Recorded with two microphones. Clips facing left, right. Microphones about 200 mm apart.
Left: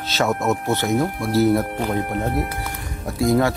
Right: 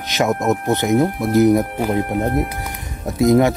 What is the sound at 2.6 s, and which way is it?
Music, 20° right (ahead or behind).